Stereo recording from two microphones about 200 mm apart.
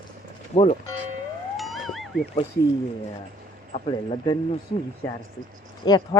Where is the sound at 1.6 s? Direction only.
Centre (ahead or behind).